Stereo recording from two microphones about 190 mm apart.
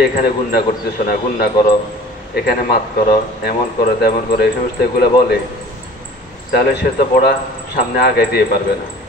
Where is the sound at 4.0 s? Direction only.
55° left (ahead or behind).